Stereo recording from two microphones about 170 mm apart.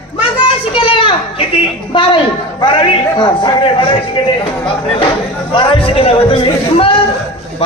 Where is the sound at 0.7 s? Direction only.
30° left (ahead or behind).